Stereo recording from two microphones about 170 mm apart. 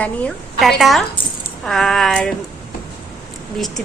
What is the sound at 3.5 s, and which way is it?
Speech, centre (ahead or behind).